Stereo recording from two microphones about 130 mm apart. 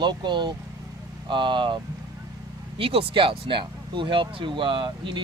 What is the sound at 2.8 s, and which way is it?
Speech, 45° right (ahead or behind).